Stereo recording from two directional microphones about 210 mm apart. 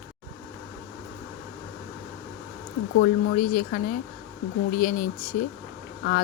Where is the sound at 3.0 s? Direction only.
45° left (ahead or behind).